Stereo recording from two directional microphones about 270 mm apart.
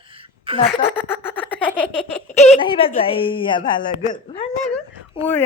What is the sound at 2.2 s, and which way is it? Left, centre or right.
Speech, left.